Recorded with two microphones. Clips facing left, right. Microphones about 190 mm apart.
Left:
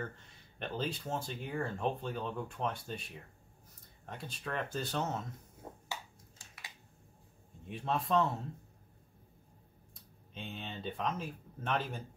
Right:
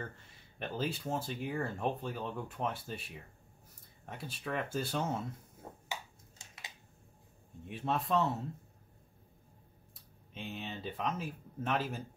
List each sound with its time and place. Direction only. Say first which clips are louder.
0.6 s speech: right 1 dB; 5° right (ahead or behind)
5.9 s a sound: right 2 dB; 20° right (ahead or behind)
7.6 s speech: even; centre (ahead or behind)
10.3 s speech: right 2 dB; 5° right (ahead or behind)